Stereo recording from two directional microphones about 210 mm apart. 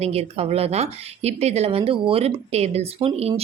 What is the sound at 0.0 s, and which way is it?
Speech, 30° right (ahead or behind).